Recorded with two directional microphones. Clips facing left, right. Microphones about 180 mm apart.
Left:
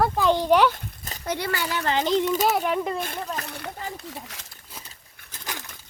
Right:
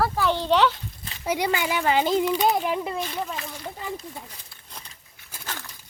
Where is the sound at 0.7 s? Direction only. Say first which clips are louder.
Left 2 dB; 45° left (ahead or behind).